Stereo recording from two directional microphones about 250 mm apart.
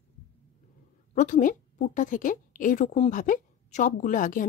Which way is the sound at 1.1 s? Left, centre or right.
Left.